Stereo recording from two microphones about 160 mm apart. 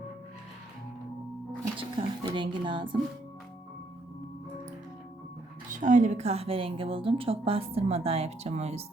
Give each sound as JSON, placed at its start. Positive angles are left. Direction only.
{"t": 1.7, "sound": "a woman's voice", "side_deg": -35}
{"t": 5.7, "sound": "a woman's voice", "side_deg": -50}